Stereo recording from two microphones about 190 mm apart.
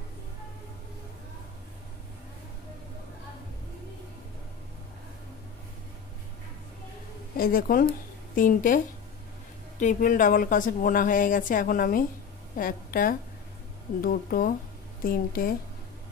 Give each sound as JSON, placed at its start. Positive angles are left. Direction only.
{"t": 7.3, "sound": "a woman's voice", "side_deg": 50}